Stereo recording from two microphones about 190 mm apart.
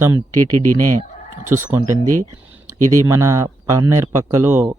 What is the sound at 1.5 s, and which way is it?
Speech, 15° right (ahead or behind).